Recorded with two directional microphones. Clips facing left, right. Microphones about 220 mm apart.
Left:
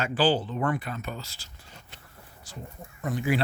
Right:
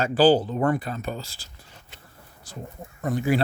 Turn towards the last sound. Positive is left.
turn(degrees=-45)  # may be behind; listen again after turning